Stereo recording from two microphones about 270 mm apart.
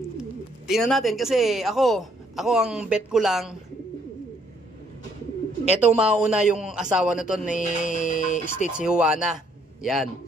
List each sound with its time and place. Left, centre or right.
0.2 s speech: centre
5.7 s a man's voice: centre
7.6 s speech: left
8.7 s speech: centre